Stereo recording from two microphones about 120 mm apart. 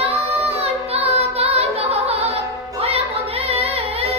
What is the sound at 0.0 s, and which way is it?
Singing, 55° right (ahead or behind).